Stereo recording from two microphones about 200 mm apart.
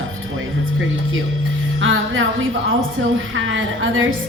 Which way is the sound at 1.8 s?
80° right.